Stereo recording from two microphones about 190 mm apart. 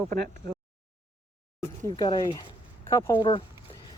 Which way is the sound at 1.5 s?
20° left (ahead or behind).